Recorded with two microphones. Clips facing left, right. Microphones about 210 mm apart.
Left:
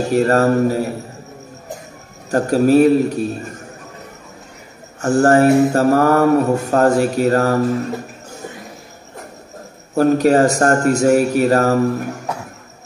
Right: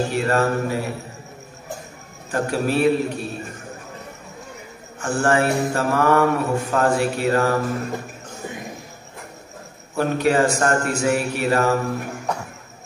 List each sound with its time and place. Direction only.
0.1 s a man's voice: 40° left (ahead or behind)
2.3 s a man's voice: 40° left (ahead or behind)
5.0 s a man's voice: 40° left (ahead or behind)
9.9 s a man's voice: 40° left (ahead or behind)